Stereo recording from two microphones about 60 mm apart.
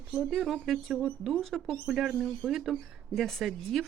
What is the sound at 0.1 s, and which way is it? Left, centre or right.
Speech, centre.